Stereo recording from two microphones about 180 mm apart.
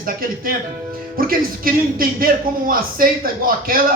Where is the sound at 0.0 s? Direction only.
50° right (ahead or behind).